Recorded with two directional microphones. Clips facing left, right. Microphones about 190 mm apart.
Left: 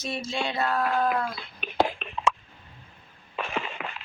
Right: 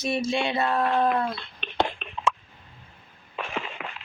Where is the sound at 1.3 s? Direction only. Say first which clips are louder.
Left 2 dB; 5° left (ahead or behind).